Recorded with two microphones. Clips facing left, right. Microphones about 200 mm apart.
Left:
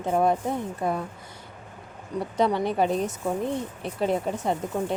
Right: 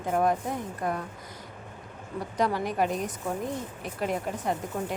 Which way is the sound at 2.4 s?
25° left (ahead or behind).